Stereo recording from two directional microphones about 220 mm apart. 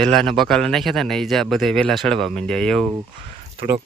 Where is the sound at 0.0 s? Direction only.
Centre (ahead or behind).